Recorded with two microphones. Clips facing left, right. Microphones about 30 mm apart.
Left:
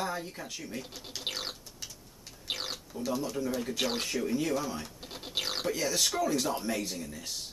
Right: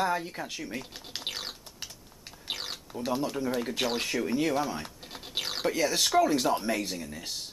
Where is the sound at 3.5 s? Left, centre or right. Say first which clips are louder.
Right 2 dB; centre.